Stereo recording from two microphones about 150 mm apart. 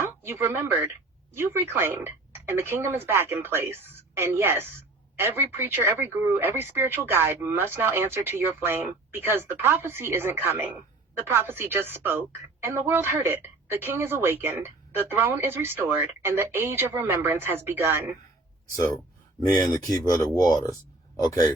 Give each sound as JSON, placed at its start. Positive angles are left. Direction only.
{"t": 0.0, "sound": "a woman's voice", "side_deg": -15}
{"t": 19.5, "sound": "speech", "side_deg": 25}